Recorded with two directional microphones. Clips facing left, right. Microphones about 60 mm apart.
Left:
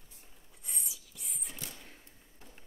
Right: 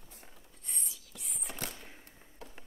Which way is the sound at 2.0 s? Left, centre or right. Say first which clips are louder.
Right 6 dB; right.